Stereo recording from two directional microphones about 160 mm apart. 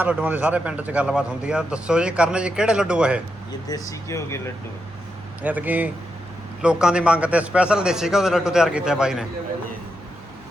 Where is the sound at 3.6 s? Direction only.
20° left (ahead or behind).